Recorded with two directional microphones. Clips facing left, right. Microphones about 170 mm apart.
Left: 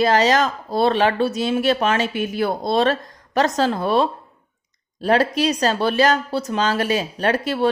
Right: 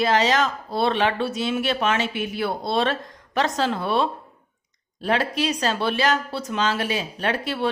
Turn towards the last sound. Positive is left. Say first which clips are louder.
# left 5 dB
turn(degrees=40)  # may be behind; listen again after turning